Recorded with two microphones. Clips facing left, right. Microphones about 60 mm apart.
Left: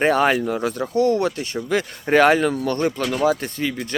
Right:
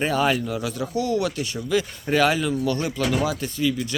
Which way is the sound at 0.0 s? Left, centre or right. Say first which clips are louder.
Left 4 dB; left.